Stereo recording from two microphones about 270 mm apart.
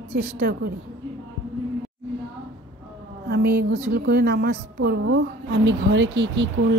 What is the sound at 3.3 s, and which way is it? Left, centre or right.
A woman's voice, right.